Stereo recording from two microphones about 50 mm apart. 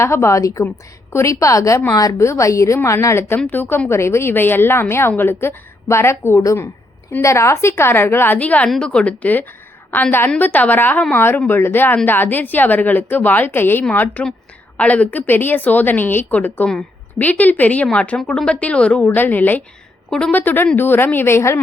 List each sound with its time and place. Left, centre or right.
0.0 s a woman's voice: left
2.1 s a woman's voice: left
3.5 s a woman's voice: left
3.8 s a woman's voice: left
8.4 s a woman's voice: left
8.8 s speech: centre
9.2 s a woman's voice: left
13.9 s a woman's voice: left
19.0 s a woman's voice: left
20.1 s a woman's voice: centre
20.3 s a woman's voice: left